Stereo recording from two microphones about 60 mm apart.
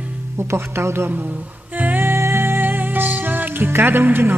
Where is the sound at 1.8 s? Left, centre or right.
Right.